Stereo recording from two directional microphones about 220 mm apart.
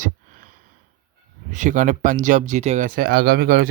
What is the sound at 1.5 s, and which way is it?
Speech, 35° right (ahead or behind).